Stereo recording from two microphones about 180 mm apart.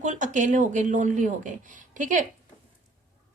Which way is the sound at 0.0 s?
45° right (ahead or behind).